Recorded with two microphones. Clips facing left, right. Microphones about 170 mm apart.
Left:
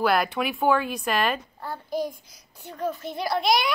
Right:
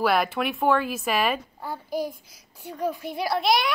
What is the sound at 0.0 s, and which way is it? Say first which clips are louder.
A child's voice: even; centre (ahead or behind).